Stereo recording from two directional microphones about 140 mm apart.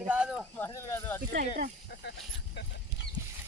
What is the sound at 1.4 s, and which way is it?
Speech, 65° right (ahead or behind).